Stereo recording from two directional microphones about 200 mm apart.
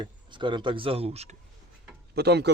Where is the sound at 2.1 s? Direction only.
55° right (ahead or behind).